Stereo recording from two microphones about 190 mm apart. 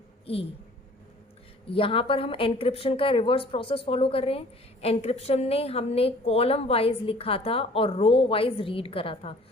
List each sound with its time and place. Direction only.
1.7 s a woman's voice: 30° left (ahead or behind)